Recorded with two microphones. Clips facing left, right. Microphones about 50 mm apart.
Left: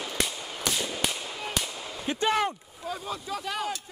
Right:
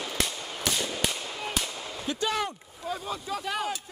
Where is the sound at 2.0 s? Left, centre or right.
Left.